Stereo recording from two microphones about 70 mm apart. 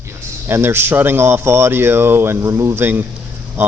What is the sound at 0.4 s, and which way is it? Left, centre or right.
A man's voice, right.